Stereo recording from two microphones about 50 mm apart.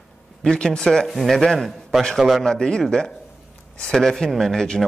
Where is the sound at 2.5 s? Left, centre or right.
Centre.